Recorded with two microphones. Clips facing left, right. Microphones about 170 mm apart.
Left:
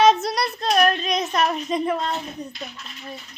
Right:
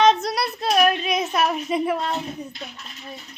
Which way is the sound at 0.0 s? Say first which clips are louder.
Left 1 dB; 5° left (ahead or behind).